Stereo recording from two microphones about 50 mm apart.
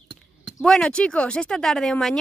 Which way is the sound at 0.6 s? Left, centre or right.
Centre.